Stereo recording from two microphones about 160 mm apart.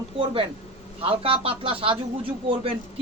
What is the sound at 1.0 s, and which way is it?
Speech, 35° right (ahead or behind).